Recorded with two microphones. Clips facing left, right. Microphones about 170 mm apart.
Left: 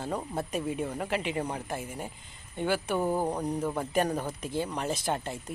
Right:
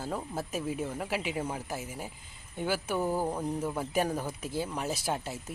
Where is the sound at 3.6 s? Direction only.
5° right (ahead or behind).